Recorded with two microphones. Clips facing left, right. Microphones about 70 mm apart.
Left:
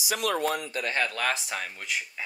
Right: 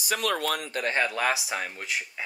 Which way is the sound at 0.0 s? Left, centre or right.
Right.